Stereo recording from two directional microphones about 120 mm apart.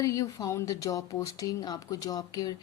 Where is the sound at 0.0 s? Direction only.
30° left (ahead or behind).